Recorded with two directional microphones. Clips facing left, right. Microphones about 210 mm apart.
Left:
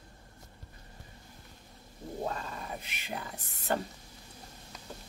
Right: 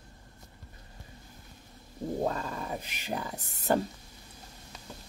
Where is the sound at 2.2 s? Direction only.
40° right (ahead or behind).